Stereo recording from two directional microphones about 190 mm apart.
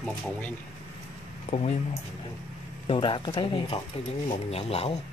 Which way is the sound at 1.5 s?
35° left (ahead or behind).